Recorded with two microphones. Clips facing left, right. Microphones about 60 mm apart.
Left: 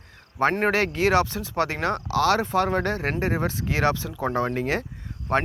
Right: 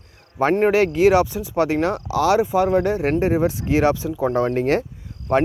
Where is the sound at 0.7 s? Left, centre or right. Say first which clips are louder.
Right 6 dB; centre.